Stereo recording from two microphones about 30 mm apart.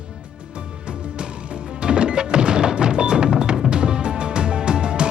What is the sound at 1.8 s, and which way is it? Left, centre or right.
Music, right.